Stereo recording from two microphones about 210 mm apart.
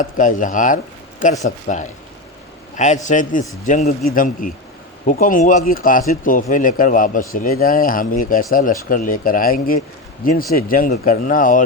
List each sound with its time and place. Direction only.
0.0 s speech: 40° left (ahead or behind)